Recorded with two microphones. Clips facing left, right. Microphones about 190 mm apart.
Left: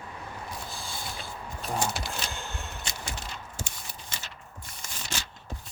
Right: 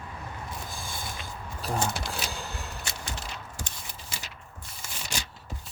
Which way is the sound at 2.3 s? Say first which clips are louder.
Right 1 dB; 35° right (ahead or behind).